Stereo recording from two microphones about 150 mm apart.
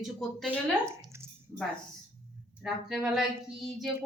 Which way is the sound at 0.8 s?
20° right (ahead or behind).